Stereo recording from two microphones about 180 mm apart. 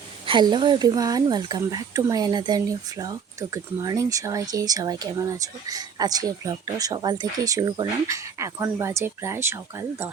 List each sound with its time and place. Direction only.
0.3 s speech: 25° right (ahead or behind)